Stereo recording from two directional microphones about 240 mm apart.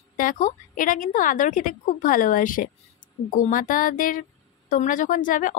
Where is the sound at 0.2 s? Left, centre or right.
Left.